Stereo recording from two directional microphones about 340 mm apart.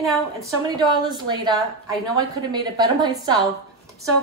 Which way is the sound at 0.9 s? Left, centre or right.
Centre.